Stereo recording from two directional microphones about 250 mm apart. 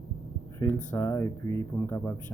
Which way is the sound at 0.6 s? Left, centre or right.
Centre.